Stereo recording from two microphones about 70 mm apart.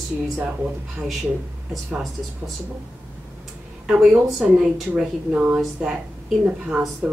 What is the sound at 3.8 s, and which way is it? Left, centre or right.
A woman's voice, centre.